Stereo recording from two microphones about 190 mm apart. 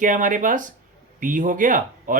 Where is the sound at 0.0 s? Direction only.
40° right (ahead or behind).